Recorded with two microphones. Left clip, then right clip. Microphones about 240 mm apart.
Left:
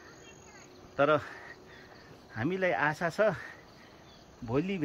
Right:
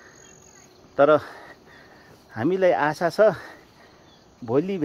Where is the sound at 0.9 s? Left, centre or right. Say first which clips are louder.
Right 9 dB; right.